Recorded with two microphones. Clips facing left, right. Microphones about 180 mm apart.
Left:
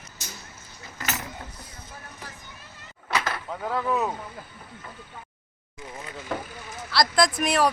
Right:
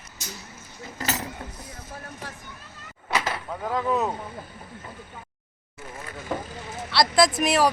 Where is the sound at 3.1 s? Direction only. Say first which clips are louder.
Right 1 dB; 20° right (ahead or behind).